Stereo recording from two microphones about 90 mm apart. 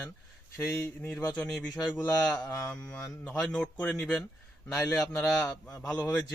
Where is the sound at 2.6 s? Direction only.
15° left (ahead or behind).